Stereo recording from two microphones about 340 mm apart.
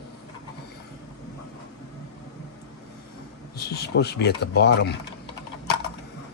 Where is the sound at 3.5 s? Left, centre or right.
Left.